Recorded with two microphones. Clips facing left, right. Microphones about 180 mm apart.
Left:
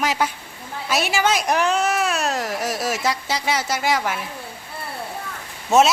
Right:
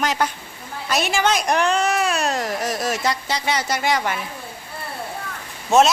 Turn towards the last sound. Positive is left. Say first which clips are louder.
# even
turn(degrees=5)  # may be behind; listen again after turning